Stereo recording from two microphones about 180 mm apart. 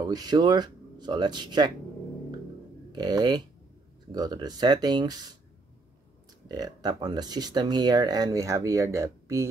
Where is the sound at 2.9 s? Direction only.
20° right (ahead or behind).